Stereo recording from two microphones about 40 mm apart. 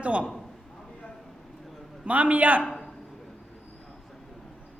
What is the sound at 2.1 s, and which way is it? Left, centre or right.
Speech, right.